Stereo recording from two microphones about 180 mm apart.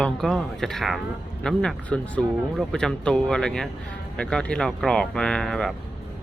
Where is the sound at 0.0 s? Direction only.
Centre (ahead or behind).